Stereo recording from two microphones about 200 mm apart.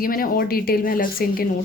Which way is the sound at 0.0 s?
45° left (ahead or behind).